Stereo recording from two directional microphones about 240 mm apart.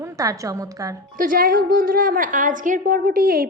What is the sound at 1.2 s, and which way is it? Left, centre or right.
A woman's voice, right.